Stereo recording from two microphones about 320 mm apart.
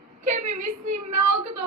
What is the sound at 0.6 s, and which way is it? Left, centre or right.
A woman's voice, right.